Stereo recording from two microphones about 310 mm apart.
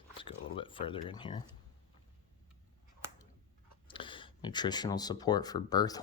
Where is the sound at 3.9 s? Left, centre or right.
Centre.